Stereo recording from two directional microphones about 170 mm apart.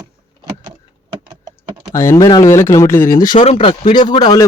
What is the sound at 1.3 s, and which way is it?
Typing, 25° right (ahead or behind).